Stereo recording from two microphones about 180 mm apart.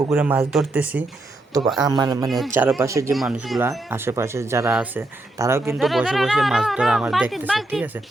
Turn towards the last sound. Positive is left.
turn(degrees=-5)  # may be behind; listen again after turning